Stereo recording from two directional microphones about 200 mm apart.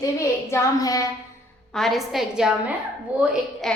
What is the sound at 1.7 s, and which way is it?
A woman's voice, centre (ahead or behind).